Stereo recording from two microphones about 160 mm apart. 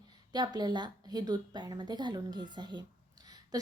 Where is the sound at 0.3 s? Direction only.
25° right (ahead or behind).